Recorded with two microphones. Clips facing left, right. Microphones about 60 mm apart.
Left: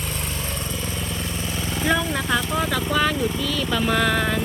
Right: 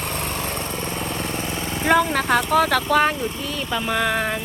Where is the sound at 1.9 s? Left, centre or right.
Right.